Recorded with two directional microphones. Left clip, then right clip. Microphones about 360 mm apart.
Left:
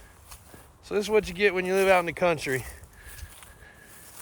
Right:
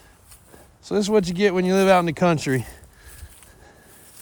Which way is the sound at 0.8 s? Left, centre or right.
Centre.